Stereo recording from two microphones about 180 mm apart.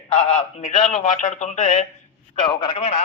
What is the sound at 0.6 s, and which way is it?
A man's voice, 45° left (ahead or behind).